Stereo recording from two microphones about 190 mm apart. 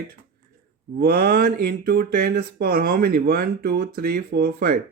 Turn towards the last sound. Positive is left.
turn(degrees=-55)  # may be behind; listen again after turning